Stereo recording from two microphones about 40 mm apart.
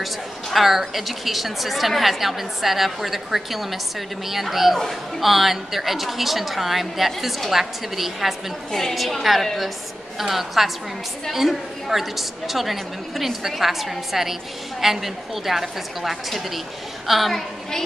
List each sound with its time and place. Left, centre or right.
0.0 s a woman's voice: centre